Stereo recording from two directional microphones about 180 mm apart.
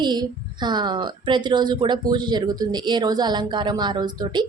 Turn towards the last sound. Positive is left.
turn(degrees=-25)  # may be behind; listen again after turning